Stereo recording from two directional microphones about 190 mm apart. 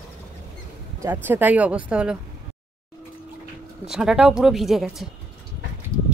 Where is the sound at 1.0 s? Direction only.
10° right (ahead or behind).